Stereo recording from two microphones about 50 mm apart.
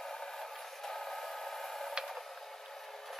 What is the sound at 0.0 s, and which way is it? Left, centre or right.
Vehicle, centre.